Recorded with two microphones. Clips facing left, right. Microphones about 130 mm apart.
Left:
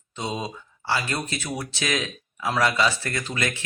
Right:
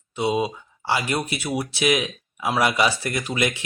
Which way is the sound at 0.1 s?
10° right (ahead or behind).